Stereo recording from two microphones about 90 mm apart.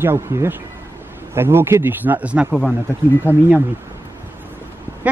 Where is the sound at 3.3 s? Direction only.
25° left (ahead or behind).